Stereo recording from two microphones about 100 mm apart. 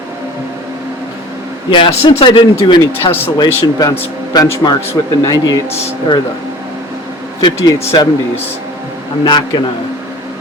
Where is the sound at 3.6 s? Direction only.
40° left (ahead or behind).